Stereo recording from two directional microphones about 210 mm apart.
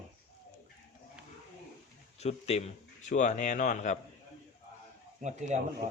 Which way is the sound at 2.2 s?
30° left (ahead or behind).